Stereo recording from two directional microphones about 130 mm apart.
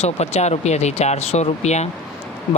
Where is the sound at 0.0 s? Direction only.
55° left (ahead or behind).